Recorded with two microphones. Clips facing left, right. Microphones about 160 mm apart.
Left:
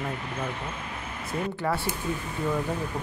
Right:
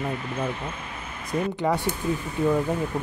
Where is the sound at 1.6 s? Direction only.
15° right (ahead or behind).